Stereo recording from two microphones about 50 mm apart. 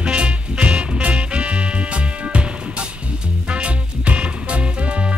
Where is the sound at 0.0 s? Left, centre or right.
Right.